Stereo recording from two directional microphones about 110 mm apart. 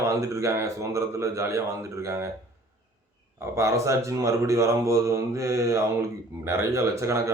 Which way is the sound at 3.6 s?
25° right (ahead or behind).